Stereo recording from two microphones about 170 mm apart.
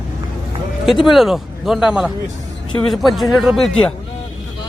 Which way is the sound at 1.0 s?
Centre (ahead or behind).